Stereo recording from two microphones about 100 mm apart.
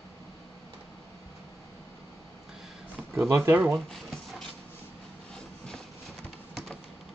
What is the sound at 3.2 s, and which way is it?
Speech, 25° right (ahead or behind).